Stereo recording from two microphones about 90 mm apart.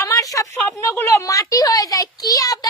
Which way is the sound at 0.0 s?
40° left (ahead or behind).